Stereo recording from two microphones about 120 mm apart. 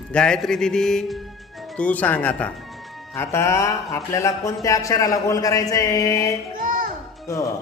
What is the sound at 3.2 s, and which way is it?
Speech, 25° left (ahead or behind).